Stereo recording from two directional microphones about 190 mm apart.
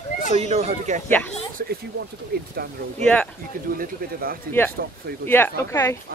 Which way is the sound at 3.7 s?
50° right (ahead or behind).